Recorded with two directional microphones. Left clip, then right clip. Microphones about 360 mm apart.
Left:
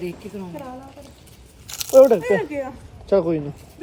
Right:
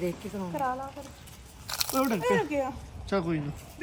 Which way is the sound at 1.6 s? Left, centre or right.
Centre.